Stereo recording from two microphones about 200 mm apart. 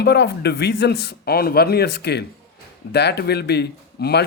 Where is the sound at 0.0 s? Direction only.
55° left (ahead or behind).